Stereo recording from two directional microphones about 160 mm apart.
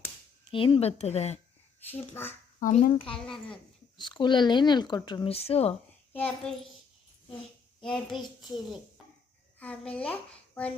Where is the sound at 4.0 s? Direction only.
30° left (ahead or behind).